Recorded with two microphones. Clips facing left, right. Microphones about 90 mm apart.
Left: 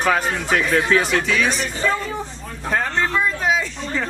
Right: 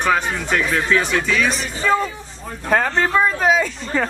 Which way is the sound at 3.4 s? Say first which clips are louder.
Right 3 dB; 45° right (ahead or behind).